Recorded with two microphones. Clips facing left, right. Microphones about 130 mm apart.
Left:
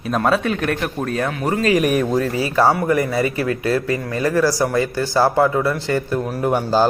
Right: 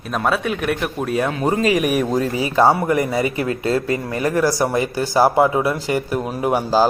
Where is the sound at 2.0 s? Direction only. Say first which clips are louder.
Even; 15° right (ahead or behind).